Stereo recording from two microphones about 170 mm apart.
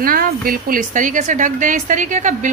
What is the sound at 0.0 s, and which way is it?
Speech, 55° right (ahead or behind).